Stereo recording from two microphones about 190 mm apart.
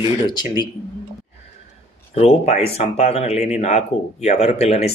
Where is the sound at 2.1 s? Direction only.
35° left (ahead or behind).